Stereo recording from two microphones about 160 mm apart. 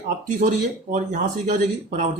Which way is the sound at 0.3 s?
55° right (ahead or behind).